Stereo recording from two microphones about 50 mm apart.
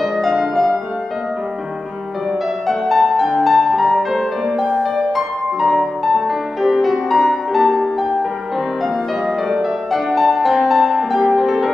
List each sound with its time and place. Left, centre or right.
0.0 s music: centre
2.7 s music: centre
9.5 s music: centre